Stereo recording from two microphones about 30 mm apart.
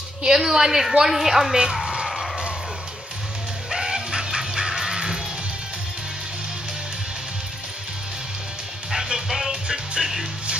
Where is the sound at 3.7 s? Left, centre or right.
Right.